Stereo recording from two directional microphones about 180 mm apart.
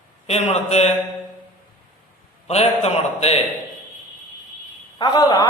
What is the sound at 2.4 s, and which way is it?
Speech, 35° left (ahead or behind).